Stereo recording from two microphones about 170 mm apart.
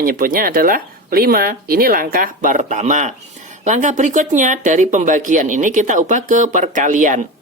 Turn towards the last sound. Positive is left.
turn(degrees=-50)  # may be behind; listen again after turning